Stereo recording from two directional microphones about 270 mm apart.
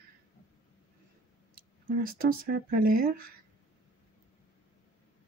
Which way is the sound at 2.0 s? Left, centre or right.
Right.